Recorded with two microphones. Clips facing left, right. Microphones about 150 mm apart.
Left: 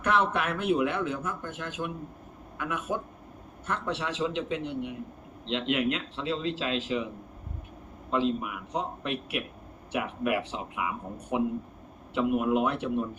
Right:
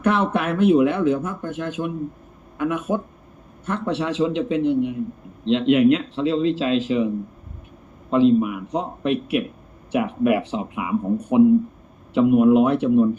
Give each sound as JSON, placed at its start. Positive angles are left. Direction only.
{"t": 0.0, "sound": "speech", "side_deg": -20}
{"t": 8.1, "sound": "speech", "side_deg": -20}